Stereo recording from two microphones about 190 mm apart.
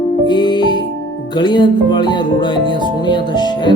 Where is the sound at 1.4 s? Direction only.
25° left (ahead or behind).